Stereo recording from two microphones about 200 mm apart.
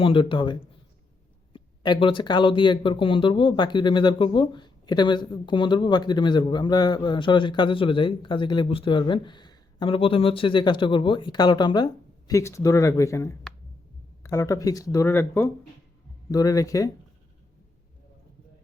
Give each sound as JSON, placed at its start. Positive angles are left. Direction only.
{"t": 0.0, "sound": "speech", "side_deg": 25}